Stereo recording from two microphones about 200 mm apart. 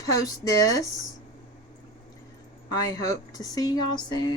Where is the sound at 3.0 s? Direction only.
15° left (ahead or behind).